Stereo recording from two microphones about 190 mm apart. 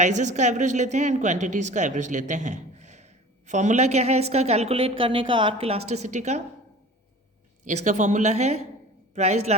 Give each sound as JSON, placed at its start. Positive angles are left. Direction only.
{"t": 0.0, "sound": "speech", "side_deg": -40}
{"t": 7.6, "sound": "speech", "side_deg": -40}